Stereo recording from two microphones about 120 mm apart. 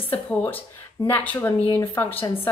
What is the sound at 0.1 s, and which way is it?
A woman's voice, 15° left (ahead or behind).